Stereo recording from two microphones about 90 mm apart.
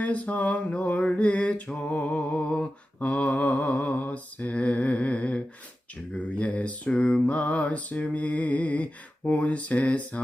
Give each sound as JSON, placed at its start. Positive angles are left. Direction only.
{"t": 0.0, "sound": "mantra", "side_deg": 15}